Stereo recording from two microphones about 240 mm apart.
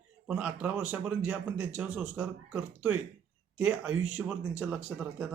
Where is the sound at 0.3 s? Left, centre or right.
Centre.